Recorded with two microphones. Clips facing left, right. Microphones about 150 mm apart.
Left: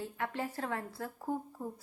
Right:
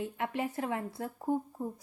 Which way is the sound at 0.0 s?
20° right (ahead or behind).